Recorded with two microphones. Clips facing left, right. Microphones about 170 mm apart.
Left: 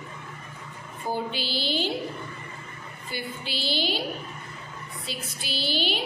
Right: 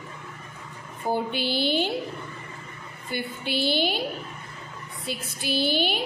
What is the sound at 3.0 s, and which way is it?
Speech, 55° right (ahead or behind).